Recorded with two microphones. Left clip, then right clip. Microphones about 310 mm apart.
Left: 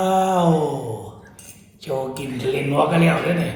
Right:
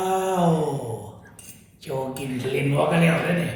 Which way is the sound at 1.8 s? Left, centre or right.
Centre.